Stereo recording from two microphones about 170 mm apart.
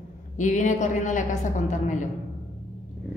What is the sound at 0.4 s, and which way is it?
Speech, 45° left (ahead or behind).